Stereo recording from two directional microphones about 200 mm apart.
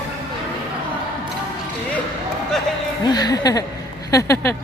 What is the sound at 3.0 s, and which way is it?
Speech, 20° left (ahead or behind).